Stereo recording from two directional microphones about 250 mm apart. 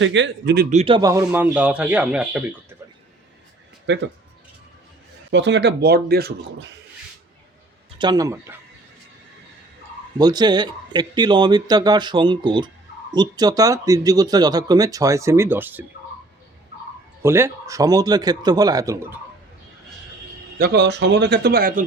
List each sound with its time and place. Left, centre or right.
0.0 s speech: right
0.8 s speech: centre
3.9 s speech: right
5.3 s speech: right
7.9 s speech: centre
10.2 s speech: centre
17.2 s speech: centre
20.6 s speech: right